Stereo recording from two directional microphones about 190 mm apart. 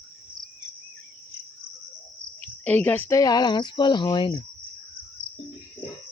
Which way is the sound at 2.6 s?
10° left (ahead or behind).